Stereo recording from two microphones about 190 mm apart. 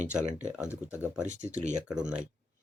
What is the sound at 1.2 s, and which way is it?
Speech, 40° right (ahead or behind).